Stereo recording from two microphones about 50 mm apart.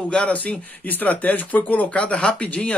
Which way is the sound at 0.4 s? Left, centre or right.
Left.